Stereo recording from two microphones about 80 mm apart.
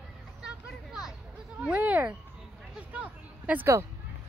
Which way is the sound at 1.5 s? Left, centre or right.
Centre.